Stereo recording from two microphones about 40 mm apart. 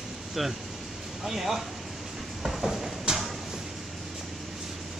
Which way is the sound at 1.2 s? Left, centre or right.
Centre.